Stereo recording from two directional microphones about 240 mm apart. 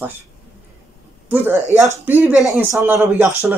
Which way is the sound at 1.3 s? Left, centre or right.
Centre.